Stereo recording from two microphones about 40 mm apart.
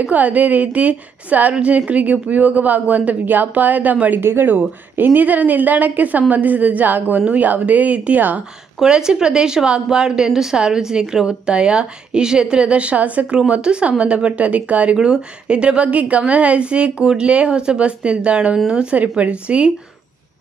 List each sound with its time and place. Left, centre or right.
0.0 s speech: right
1.5 s a woman's voice: right
4.2 s speech: right
8.8 s a woman's voice: centre; by 15.0 s right
15.0 s a woman's voice: right